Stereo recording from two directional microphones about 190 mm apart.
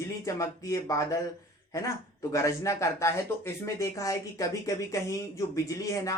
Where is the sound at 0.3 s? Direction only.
15° left (ahead or behind).